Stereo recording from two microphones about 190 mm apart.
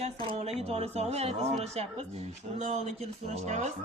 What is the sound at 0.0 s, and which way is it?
Speech, 30° right (ahead or behind).